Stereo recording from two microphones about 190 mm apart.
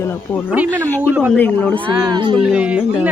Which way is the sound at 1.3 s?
10° left (ahead or behind).